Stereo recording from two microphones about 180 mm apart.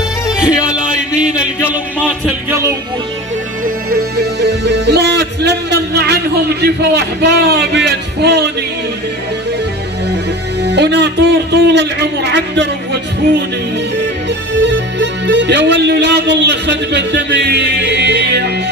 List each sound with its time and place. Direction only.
1.1 s a sound: 5° right (ahead or behind)
2.0 s speech: 5° left (ahead or behind)
3.6 s music: 65° right (ahead or behind)
10.6 s a man's voice: 70° right (ahead or behind)
14.5 s music: 80° right